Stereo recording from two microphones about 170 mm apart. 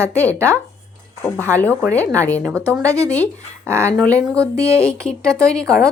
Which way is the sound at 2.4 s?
20° right (ahead or behind).